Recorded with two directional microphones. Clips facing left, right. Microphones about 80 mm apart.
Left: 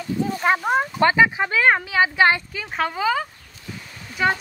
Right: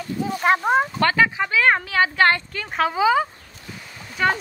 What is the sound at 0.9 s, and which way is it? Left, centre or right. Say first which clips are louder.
A woman's voice: left 2 dB; centre.